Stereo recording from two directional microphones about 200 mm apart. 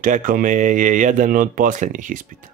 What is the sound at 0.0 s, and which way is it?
Speech, 45° right (ahead or behind).